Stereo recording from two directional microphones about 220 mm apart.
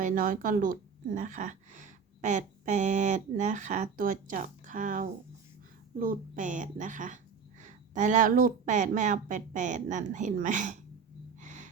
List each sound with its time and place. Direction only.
0.0 s a woman's voice: 40° right (ahead or behind)
11.3 s gasp: 35° right (ahead or behind)